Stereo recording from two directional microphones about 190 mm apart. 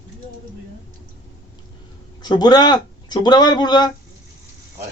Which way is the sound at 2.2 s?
20° left (ahead or behind).